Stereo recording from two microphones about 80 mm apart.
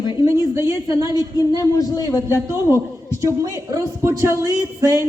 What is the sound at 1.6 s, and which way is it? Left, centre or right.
Speech, left.